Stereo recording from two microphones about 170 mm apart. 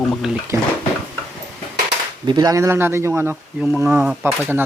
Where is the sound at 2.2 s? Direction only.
25° right (ahead or behind).